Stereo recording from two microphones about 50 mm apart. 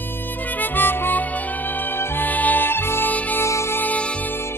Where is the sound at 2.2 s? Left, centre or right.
Left.